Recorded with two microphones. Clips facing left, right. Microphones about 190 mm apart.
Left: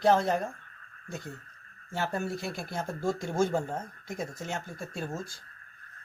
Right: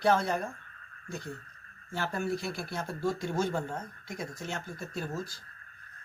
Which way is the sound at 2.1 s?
50° left (ahead or behind).